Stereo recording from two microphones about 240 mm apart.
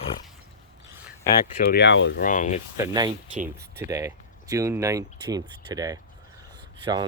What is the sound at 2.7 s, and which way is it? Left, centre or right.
Speech, centre.